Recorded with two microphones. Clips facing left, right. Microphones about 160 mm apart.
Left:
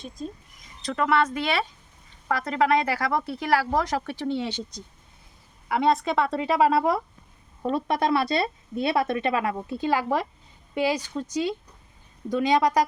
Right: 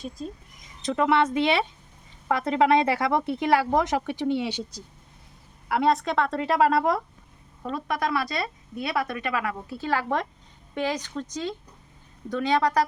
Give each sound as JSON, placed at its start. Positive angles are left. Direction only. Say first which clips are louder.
{"t": 0.9, "sound": "speech", "louder": "right 1 dB", "side_deg": -20}
{"t": 5.6, "sound": "a woman's voice", "louder": "even", "side_deg": 0}
{"t": 7.6, "sound": "speech", "louder": "left 4 dB", "side_deg": 30}